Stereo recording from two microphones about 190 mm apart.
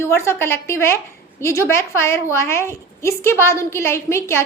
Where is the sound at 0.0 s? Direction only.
15° left (ahead or behind).